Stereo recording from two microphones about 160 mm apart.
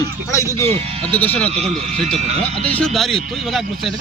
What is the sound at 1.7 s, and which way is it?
Speech, 45° right (ahead or behind).